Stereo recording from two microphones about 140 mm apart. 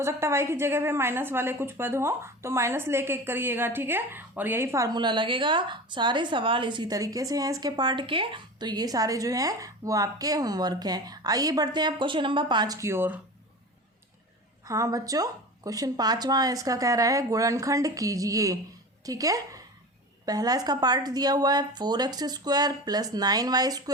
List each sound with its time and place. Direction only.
0.0 s a woman's voice: 20° right (ahead or behind)
14.6 s a woman's voice: 25° right (ahead or behind)